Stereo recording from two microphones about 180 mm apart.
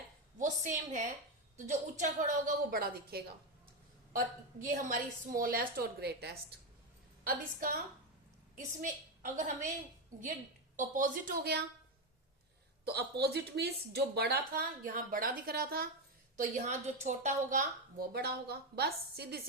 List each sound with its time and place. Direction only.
0.3 s a woman's voice: 45° right (ahead or behind); by 3.2 s 60° right (ahead or behind)
4.6 s a woman's voice: 45° right (ahead or behind)
8.5 s a woman's voice: 45° right (ahead or behind)
10.8 s a woman's voice: 45° right (ahead or behind)
12.8 s speech: 65° right (ahead or behind)
16.4 s a woman's voice: 40° right (ahead or behind)
18.1 s speech: 60° right (ahead or behind)